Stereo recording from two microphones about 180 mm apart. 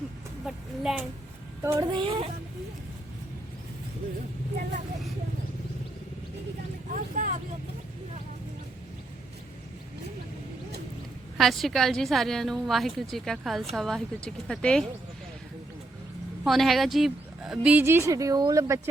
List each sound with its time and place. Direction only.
0.4 s speech: centre (ahead or behind)
1.6 s speech: 20° right (ahead or behind)
6.9 s speech: 45° right (ahead or behind)
11.3 s a woman's voice: centre (ahead or behind)
16.4 s a woman's voice: centre (ahead or behind); by 18.8 s 20° right (ahead or behind)